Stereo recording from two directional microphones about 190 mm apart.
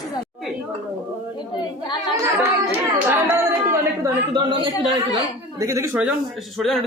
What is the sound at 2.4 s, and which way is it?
A woman's voice, 10° right (ahead or behind).